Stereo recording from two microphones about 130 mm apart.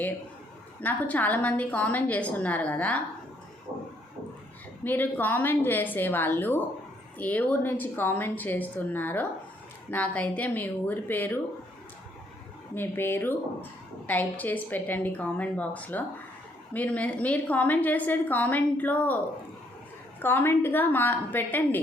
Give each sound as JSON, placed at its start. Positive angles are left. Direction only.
{"t": 0.8, "sound": "a woman's voice", "side_deg": 10}
{"t": 4.8, "sound": "a woman's voice", "side_deg": 15}
{"t": 12.7, "sound": "a woman's voice", "side_deg": 15}
{"t": 20.2, "sound": "a woman's voice", "side_deg": 15}